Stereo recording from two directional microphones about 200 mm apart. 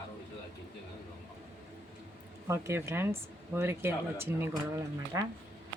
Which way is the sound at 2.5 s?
15° right (ahead or behind).